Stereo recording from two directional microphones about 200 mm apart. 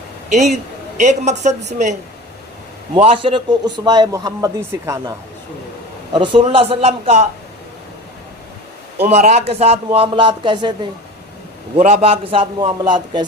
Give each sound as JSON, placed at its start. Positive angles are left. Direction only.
{"t": 0.3, "sound": "speech", "side_deg": -35}
{"t": 2.9, "sound": "a man's voice", "side_deg": -25}
{"t": 6.1, "sound": "a man's voice", "side_deg": -25}
{"t": 9.0, "sound": "a man's voice", "side_deg": -35}
{"t": 11.8, "sound": "a man's voice", "side_deg": -30}